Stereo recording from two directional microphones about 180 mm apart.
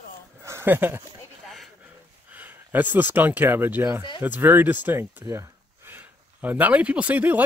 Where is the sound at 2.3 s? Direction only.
10° right (ahead or behind).